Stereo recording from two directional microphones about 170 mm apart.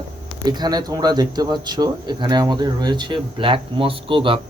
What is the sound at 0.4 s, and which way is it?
Speech, 25° right (ahead or behind).